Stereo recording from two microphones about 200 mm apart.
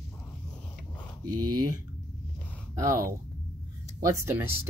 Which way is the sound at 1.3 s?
20° right (ahead or behind).